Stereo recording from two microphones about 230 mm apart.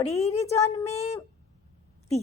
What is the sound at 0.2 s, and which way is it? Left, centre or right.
A woman's voice, left.